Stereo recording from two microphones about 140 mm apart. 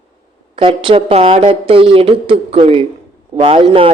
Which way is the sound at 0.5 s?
35° right (ahead or behind).